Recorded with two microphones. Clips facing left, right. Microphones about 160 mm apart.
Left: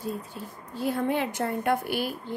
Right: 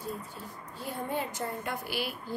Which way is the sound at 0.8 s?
90° left.